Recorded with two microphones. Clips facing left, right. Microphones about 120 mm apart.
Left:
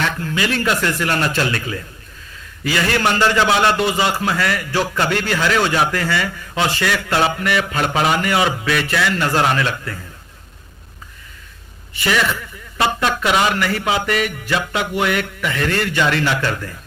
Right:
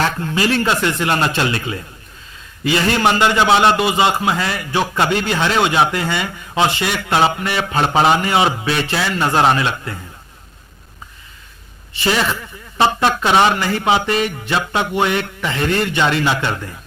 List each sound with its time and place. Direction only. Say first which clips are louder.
0.2 s a man's voice: right 3 dB; 30° right (ahead or behind)
11.9 s a man's voice: right 1 dB; 30° right (ahead or behind)